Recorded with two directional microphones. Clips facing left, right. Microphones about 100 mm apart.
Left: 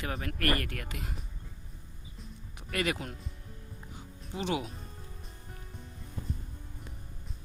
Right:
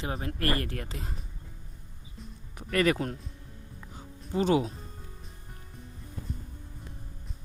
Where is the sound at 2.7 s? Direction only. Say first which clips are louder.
Right 7 dB; 40° right (ahead or behind).